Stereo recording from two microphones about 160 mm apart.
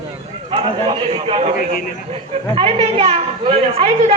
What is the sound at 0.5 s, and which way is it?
Speech, 35° right (ahead or behind).